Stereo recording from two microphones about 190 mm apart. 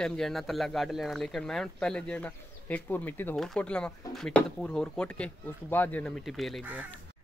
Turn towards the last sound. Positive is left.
turn(degrees=-5)  # may be behind; listen again after turning